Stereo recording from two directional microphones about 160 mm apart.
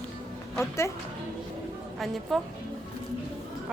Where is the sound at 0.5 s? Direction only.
15° left (ahead or behind).